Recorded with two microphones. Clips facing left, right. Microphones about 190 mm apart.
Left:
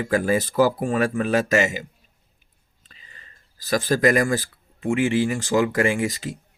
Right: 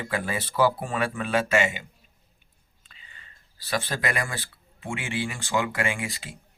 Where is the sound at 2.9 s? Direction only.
40° left (ahead or behind).